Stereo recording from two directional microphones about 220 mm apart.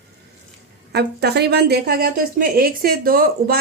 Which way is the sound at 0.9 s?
50° right (ahead or behind).